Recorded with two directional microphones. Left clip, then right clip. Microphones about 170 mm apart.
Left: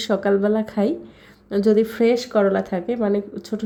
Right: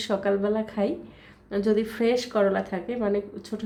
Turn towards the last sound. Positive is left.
turn(degrees=30)  # may be behind; listen again after turning